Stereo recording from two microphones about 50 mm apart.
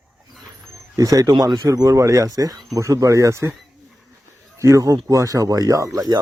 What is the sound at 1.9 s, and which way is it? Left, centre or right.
Speech, right.